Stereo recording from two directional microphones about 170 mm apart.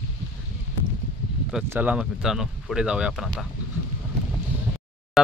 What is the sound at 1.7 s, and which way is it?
Speech, 10° right (ahead or behind).